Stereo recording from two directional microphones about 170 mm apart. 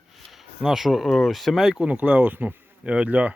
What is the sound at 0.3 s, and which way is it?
Speech, centre (ahead or behind).